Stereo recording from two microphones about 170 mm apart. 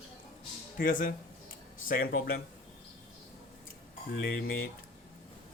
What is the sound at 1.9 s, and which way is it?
Speech, 65° left (ahead or behind).